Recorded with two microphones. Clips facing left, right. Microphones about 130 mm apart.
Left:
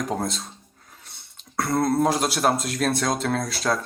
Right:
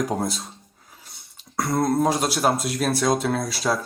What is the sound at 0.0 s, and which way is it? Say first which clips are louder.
Speech: right 2 dB; 5° right (ahead or behind).